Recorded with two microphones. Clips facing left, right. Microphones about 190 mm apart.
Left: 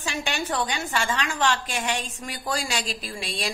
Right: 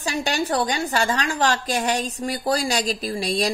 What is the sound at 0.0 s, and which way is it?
A woman's voice, 40° right (ahead or behind).